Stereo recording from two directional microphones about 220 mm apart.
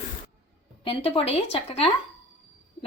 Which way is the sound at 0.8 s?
25° left (ahead or behind).